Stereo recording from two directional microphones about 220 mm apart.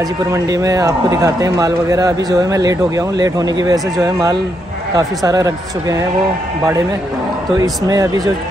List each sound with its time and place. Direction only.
0.3 s speech: 15° right (ahead or behind)
7.6 s speech: 15° right (ahead or behind)